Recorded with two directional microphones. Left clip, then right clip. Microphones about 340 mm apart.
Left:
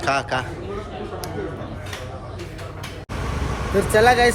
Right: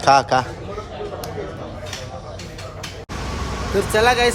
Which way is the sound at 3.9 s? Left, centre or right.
Centre.